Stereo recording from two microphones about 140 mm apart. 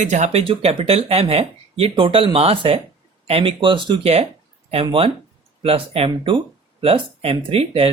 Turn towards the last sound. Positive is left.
turn(degrees=-45)  # may be behind; listen again after turning